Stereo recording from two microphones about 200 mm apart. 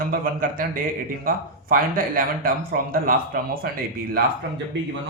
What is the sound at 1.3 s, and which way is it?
Speech, 45° right (ahead or behind).